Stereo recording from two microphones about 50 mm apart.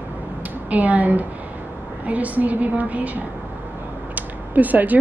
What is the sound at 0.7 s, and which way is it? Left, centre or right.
Speech, right.